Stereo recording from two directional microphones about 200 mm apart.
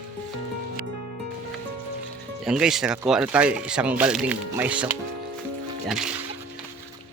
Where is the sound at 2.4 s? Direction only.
5° right (ahead or behind).